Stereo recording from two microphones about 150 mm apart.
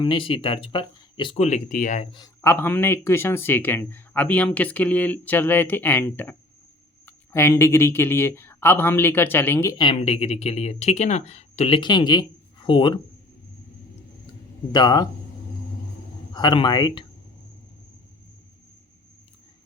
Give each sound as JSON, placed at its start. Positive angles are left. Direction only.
{"t": 0.0, "sound": "speech", "side_deg": 35}
{"t": 1.4, "sound": "speech", "side_deg": 50}
{"t": 2.0, "sound": "speech", "side_deg": 35}
{"t": 2.4, "sound": "speech", "side_deg": 15}
{"t": 9.7, "sound": "speech", "side_deg": 35}
{"t": 11.8, "sound": "speech", "side_deg": 30}
{"t": 14.7, "sound": "speech", "side_deg": 30}
{"t": 16.3, "sound": "speech", "side_deg": 30}